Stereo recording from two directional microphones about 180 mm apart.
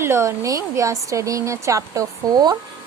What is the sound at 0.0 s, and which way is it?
A woman's voice, 15° right (ahead or behind).